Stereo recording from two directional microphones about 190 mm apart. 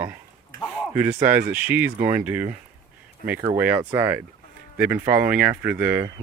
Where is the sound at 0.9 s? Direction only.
10° right (ahead or behind).